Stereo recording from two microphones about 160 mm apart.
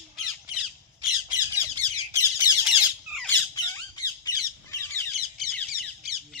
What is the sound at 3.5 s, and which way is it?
Squawk, 25° left (ahead or behind).